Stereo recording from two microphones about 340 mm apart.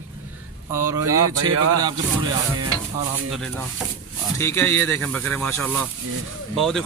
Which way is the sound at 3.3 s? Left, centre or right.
Centre.